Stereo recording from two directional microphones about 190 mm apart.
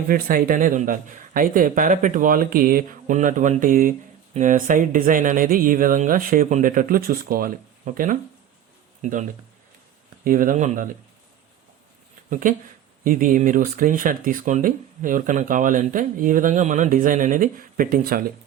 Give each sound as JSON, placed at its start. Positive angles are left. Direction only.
{"t": 0.1, "sound": "speech", "side_deg": -50}
{"t": 10.2, "sound": "speech", "side_deg": -45}
{"t": 12.3, "sound": "speech", "side_deg": -45}